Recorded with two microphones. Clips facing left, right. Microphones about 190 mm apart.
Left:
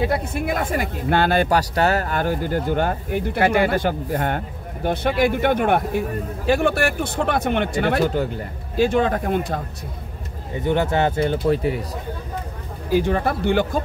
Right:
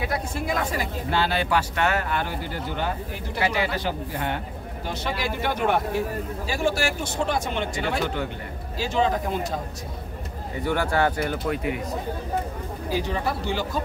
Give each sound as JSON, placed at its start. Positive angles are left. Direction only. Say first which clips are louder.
{"t": 0.3, "sound": "speech", "louder": "left 4 dB", "side_deg": 55}
{"t": 10.6, "sound": "speech", "louder": "left 3 dB", "side_deg": 20}
{"t": 12.9, "sound": "speech", "louder": "left 7 dB", "side_deg": 55}